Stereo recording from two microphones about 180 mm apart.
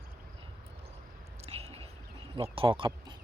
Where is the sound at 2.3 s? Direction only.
30° right (ahead or behind).